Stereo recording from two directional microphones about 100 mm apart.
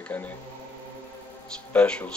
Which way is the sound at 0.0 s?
15° left (ahead or behind).